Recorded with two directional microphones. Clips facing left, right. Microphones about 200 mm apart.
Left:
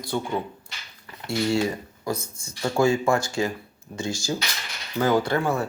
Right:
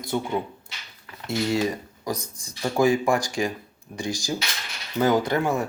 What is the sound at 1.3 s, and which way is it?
Speech, 20° right (ahead or behind).